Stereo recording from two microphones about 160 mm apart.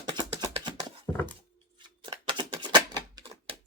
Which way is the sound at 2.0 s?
30° right (ahead or behind).